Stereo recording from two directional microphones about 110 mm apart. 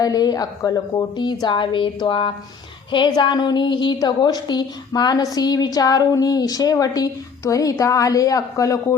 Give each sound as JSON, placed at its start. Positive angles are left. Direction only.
{"t": 0.0, "sound": "a woman's voice", "side_deg": 35}